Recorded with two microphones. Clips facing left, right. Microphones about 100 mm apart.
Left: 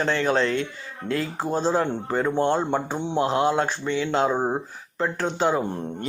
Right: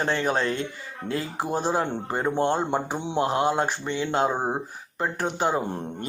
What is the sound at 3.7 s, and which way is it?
Speech, 45° right (ahead or behind).